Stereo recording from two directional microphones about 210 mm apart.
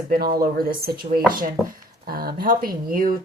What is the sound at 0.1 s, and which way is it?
Speech, 45° right (ahead or behind).